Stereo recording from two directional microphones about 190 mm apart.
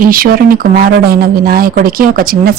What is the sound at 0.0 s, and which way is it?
A woman's voice, 50° right (ahead or behind).